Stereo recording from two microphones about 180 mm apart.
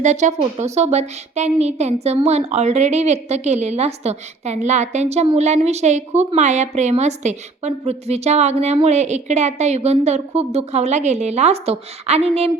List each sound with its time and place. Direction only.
0.0 s a woman's voice: 40° right (ahead or behind)